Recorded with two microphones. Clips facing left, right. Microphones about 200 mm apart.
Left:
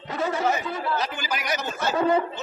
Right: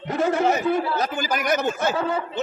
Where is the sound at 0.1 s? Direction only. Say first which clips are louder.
Right 4 dB; 50° right (ahead or behind).